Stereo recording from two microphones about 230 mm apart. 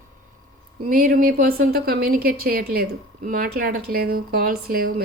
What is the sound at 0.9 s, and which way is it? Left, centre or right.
A woman's voice, right.